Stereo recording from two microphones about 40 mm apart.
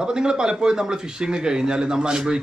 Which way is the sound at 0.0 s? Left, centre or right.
Centre.